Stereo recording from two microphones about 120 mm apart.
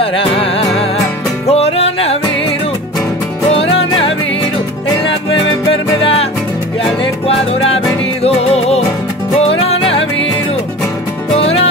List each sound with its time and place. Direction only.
0.0 s music: 50° left (ahead or behind)
5.7 s music: 50° left (ahead or behind)
7.2 s music: 55° left (ahead or behind)
11.3 s music: 55° left (ahead or behind)